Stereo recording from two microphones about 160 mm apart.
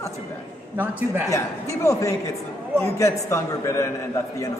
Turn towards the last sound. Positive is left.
turn(degrees=20)  # may be behind; listen again after turning